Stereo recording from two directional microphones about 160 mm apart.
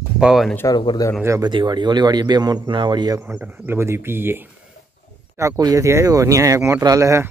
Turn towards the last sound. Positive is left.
turn(degrees=-20)  # may be behind; listen again after turning